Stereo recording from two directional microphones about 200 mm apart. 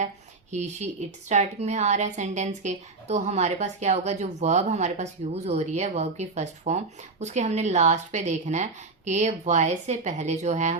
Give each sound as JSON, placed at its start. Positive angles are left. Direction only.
{"t": 0.8, "sound": "a woman's voice", "side_deg": -35}